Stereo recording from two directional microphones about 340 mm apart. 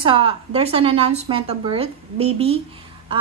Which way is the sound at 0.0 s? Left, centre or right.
Centre.